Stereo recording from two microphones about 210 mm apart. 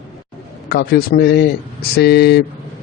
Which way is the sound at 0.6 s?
45° left (ahead or behind).